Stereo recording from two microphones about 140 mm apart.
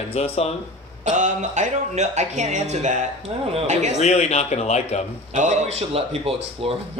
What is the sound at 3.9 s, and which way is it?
A man's voice, 50° left (ahead or behind).